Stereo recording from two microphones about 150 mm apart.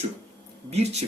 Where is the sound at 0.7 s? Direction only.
45° right (ahead or behind).